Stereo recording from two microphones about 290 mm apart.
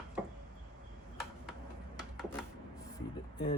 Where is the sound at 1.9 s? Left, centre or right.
Centre.